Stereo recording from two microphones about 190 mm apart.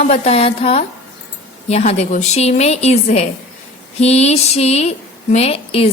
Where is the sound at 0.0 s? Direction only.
35° left (ahead or behind).